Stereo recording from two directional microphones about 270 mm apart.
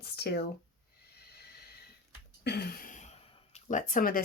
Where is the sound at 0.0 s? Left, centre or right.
Left.